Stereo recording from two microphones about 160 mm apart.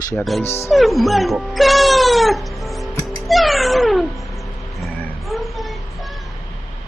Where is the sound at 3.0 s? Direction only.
Centre (ahead or behind).